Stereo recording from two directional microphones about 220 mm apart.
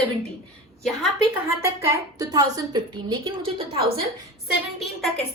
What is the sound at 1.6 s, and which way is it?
A woman's voice, 15° right (ahead or behind).